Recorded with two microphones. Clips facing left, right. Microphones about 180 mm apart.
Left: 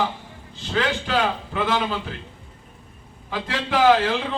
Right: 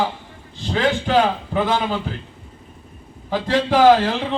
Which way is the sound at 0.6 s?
40° right (ahead or behind).